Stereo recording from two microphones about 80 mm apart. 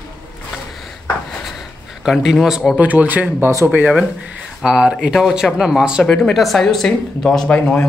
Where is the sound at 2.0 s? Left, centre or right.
Centre.